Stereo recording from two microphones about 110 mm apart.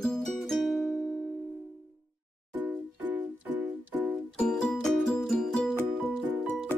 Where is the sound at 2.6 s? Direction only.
20° right (ahead or behind).